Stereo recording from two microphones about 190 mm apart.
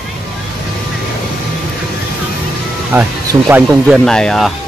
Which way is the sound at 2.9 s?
15° right (ahead or behind).